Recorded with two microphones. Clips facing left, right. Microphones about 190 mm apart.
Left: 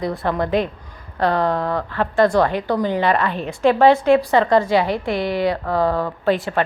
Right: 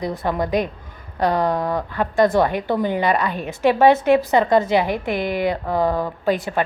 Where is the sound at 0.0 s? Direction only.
20° right (ahead or behind).